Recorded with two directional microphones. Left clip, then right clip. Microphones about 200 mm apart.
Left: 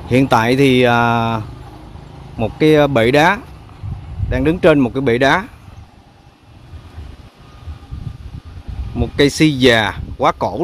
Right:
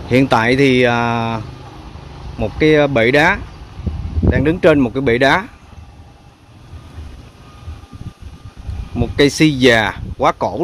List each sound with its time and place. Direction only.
0.1 s speech: 10° left (ahead or behind)
8.9 s speech: 5° left (ahead or behind)